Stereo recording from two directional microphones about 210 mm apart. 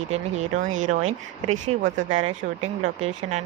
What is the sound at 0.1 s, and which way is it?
Speech, 35° right (ahead or behind).